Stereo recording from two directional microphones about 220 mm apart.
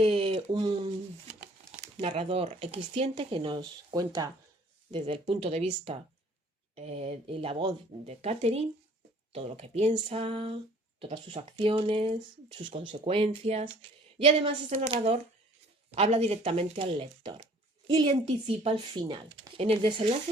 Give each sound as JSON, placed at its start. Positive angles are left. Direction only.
{"t": 0.0, "sound": "speech", "side_deg": -25}